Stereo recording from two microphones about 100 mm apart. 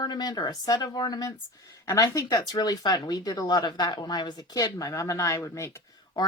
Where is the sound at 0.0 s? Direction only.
40° left (ahead or behind).